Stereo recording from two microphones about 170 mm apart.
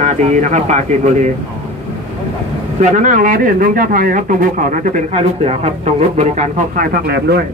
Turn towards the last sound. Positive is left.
turn(degrees=-70)  # may be behind; listen again after turning